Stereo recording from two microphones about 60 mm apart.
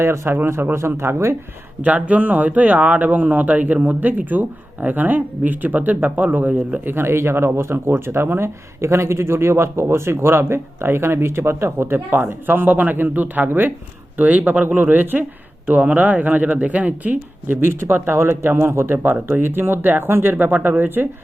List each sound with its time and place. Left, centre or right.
0.0 s speech: right
2.0 s speech: right
6.8 s speech: right
17.6 s speech: right